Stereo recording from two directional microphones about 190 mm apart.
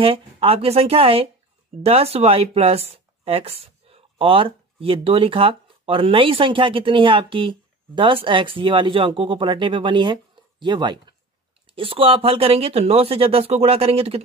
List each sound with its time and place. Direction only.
0.0 s speech: 30° right (ahead or behind)